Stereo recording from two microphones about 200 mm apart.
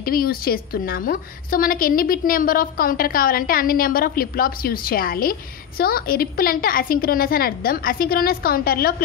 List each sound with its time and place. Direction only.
0.0 s a woman's voice: 45° left (ahead or behind)